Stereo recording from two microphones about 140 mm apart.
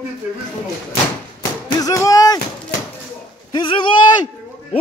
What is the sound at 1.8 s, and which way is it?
Speech, 25° left (ahead or behind).